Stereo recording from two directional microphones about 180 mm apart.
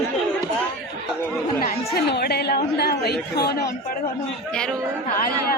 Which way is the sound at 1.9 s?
65° left (ahead or behind).